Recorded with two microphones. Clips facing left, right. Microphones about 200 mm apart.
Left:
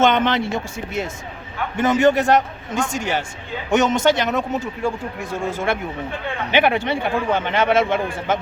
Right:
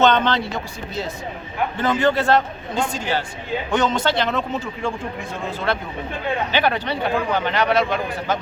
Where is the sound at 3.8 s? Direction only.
45° left (ahead or behind).